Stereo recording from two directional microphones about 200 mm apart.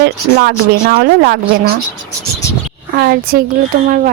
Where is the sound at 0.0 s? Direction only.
55° right (ahead or behind).